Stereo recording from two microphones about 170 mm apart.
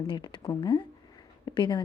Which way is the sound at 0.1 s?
30° left (ahead or behind).